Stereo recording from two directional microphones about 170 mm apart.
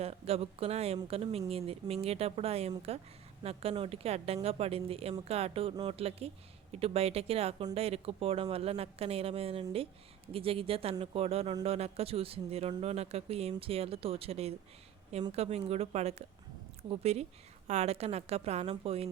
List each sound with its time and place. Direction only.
0.0 s speech: 35° right (ahead or behind)